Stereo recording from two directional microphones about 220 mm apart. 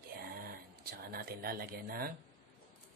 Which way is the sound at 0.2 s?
40° right (ahead or behind).